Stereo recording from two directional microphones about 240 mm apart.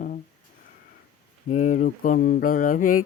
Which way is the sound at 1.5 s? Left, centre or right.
Left.